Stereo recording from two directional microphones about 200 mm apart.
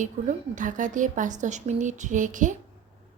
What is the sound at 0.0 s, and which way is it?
A woman's voice, 40° right (ahead or behind).